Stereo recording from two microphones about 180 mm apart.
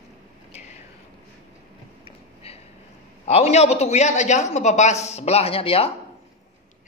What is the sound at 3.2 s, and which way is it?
A man's voice, 35° left (ahead or behind).